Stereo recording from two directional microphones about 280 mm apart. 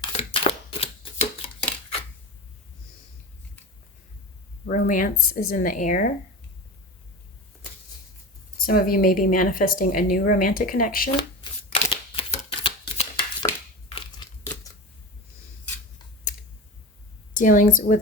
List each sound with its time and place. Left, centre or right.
0.0 s a sound: centre
4.6 s speech: left
8.5 s speech: left
11.7 s shuffling cards: centre
13.9 s a sound: centre
17.3 s speech: left